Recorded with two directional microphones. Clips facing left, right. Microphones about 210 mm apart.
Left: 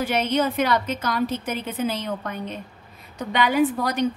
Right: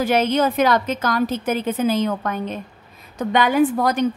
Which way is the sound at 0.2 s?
90° right.